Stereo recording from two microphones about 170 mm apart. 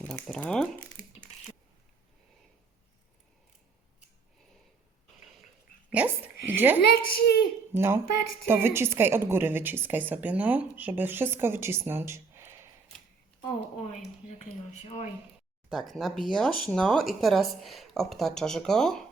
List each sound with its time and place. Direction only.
0.0 s speech: 5° left (ahead or behind)
5.9 s speech: 10° right (ahead or behind)
6.9 s a woman's voice: 70° left (ahead or behind)
7.7 s speech: 15° right (ahead or behind)
14.7 s speech: 40° left (ahead or behind)
15.7 s speech: centre (ahead or behind)